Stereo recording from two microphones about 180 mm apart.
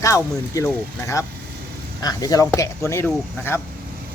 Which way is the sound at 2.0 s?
20° left (ahead or behind).